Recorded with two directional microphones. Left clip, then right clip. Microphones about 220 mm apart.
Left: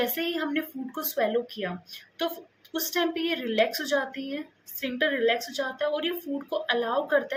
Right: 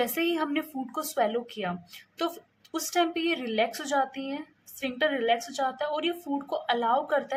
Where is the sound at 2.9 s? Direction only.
20° right (ahead or behind).